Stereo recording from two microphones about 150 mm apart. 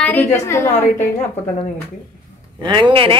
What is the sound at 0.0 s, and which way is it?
Speech, 10° left (ahead or behind).